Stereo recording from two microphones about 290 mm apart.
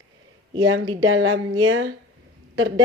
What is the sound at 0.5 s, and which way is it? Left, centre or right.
A woman's voice, right.